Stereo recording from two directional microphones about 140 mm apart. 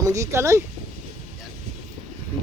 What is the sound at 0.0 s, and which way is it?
Speech, 20° right (ahead or behind).